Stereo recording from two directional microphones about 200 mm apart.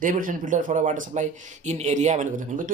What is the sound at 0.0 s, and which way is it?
Speech, 40° right (ahead or behind).